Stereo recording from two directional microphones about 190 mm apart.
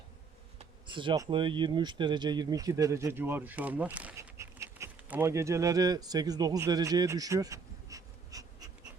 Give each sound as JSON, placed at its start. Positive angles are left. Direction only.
{"t": 0.6, "sound": "speech", "side_deg": -25}